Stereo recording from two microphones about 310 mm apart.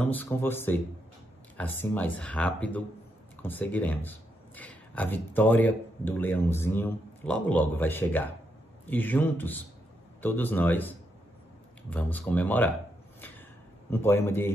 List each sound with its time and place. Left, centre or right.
0.0 s speech: centre
11.9 s speech: centre
13.8 s speech: centre